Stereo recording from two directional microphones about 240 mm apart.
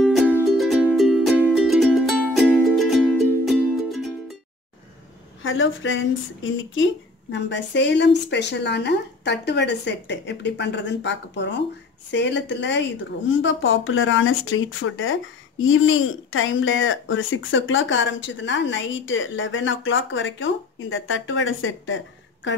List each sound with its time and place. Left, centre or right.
0.0 s music: centre
5.4 s speech: left